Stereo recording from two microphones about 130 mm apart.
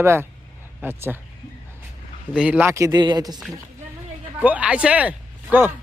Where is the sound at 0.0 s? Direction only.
20° right (ahead or behind).